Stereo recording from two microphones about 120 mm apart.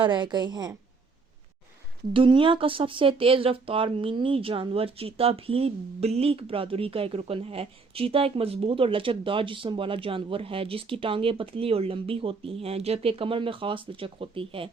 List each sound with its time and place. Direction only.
0.0 s a woman's voice: 40° right (ahead or behind)
2.1 s speech: 45° right (ahead or behind)